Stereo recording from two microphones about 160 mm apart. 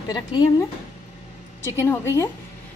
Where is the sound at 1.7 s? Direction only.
15° left (ahead or behind).